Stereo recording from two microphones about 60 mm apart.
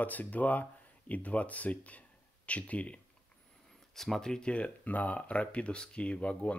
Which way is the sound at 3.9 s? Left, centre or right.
Centre.